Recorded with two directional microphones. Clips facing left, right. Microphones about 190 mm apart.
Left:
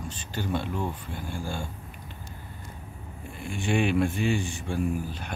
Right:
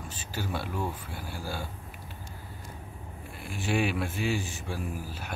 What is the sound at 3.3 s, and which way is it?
Speech, 5° right (ahead or behind).